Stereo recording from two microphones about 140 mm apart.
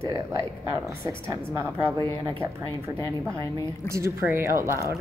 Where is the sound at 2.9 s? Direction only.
20° left (ahead or behind).